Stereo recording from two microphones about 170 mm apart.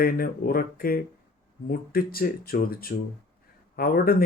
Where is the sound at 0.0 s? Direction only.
60° left (ahead or behind).